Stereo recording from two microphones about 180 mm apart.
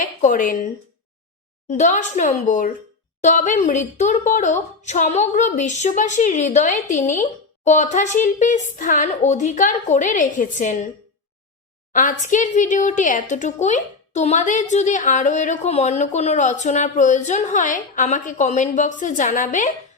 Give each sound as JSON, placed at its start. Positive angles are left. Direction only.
{"t": 0.0, "sound": "a woman's voice", "side_deg": 45}
{"t": 1.7, "sound": "a woman's voice", "side_deg": 40}
{"t": 11.9, "sound": "a woman's voice", "side_deg": 45}